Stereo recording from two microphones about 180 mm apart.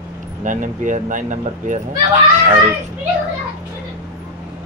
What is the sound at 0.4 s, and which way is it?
Speech, 45° right (ahead or behind).